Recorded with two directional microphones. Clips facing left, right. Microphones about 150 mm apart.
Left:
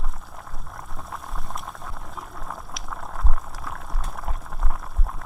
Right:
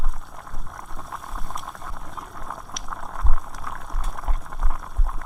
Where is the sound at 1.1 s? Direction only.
Centre (ahead or behind).